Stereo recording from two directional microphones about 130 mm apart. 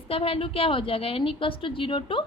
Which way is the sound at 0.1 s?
45° left (ahead or behind).